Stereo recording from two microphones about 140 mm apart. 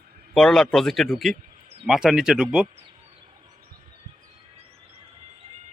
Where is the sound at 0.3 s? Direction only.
Centre (ahead or behind).